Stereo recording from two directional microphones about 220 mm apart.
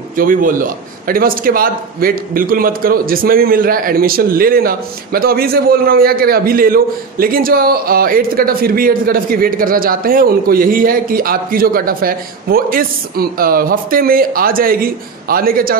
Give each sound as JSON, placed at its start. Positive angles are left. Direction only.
{"t": 0.1, "sound": "a man's voice", "side_deg": -40}